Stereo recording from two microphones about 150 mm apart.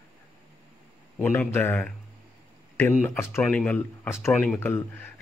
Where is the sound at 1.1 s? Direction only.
15° left (ahead or behind).